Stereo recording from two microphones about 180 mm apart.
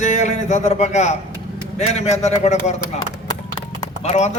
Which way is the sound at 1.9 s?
40° left (ahead or behind).